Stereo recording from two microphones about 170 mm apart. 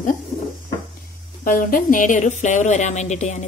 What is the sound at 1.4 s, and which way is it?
Speech, 55° left (ahead or behind).